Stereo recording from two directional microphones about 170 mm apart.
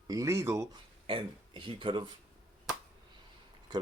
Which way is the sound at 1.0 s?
30° right (ahead or behind).